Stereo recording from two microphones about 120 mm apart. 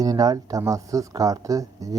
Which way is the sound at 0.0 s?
30° right (ahead or behind).